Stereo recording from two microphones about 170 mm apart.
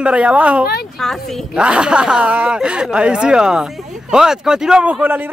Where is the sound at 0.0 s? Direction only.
5° right (ahead or behind).